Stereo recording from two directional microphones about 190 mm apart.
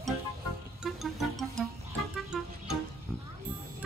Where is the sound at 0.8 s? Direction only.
Centre (ahead or behind).